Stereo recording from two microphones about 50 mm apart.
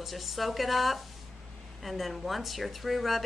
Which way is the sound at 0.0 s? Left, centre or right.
Centre.